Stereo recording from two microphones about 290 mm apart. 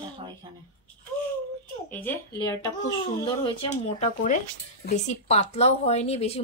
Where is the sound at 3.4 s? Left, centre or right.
Left.